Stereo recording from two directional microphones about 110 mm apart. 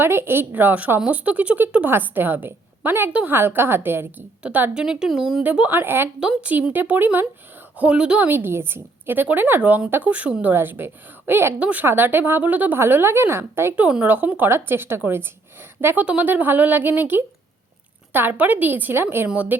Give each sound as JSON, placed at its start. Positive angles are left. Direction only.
{"t": 0.0, "sound": "a woman's voice", "side_deg": -20}
{"t": 5.4, "sound": "a woman's voice", "side_deg": -15}
{"t": 8.3, "sound": "a woman's voice", "side_deg": -20}